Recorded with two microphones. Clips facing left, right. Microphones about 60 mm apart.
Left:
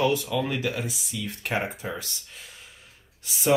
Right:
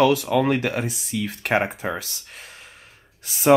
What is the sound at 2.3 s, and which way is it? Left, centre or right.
Gasp, right.